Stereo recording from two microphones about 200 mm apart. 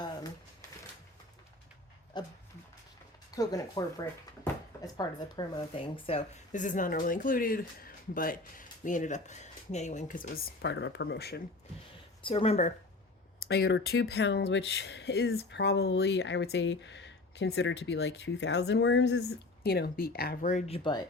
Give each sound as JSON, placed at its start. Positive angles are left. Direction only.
{"t": 2.1, "sound": "speech", "side_deg": 20}
{"t": 3.3, "sound": "speech", "side_deg": 20}
{"t": 12.2, "sound": "speech", "side_deg": 30}
{"t": 13.4, "sound": "speech", "side_deg": 55}
{"t": 19.6, "sound": "speech", "side_deg": 50}